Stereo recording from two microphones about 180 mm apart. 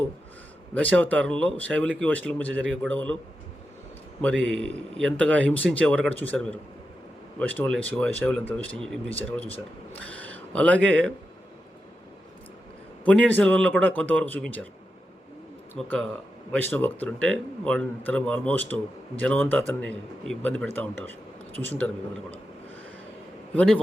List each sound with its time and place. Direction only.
0.7 s a man's voice: 10° left (ahead or behind)
4.4 s a man's voice: 90° right
4.9 s a man's voice: 5° left (ahead or behind)
10.0 s speech: 90° right
10.3 s a sound: 10° left (ahead or behind)
13.1 s a man's voice: 10° left (ahead or behind)
15.8 s a man's voice: 5° left (ahead or behind)
23.6 s a man's voice: 5° left (ahead or behind)